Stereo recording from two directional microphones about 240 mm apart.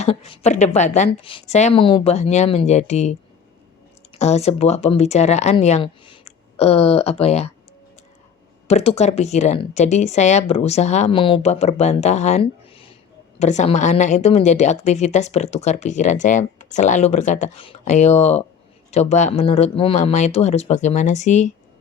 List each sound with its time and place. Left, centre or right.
0.0 s a woman's voice: left
8.6 s a woman's voice: left